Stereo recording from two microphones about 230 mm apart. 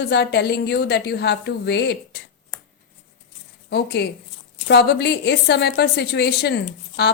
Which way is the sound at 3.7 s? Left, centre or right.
Left.